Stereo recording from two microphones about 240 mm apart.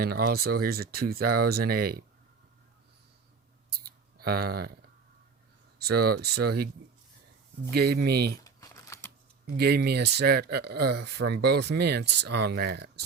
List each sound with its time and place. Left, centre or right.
0.0 s speech: right
3.8 s a sound: right
5.8 s speech: right
7.7 s speech: right
8.4 s typing: centre
9.5 s speech: right